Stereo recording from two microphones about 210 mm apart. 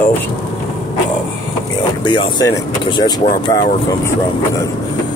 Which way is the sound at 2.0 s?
20° left (ahead or behind).